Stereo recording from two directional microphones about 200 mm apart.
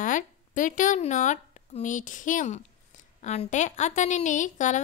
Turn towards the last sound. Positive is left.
turn(degrees=40)  # may be behind; listen again after turning